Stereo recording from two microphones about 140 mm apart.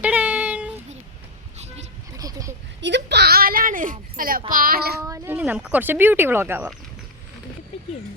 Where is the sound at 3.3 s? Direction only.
90° right.